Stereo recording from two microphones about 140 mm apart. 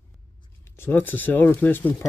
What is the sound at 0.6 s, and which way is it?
Speech, 15° left (ahead or behind).